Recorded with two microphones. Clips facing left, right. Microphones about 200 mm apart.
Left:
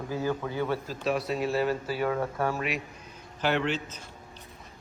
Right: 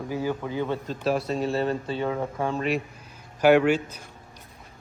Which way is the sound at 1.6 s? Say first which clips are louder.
Right 1 dB; 25° right (ahead or behind).